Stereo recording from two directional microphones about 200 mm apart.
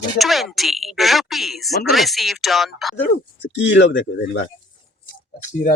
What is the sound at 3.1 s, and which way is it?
Speech, 65° left (ahead or behind).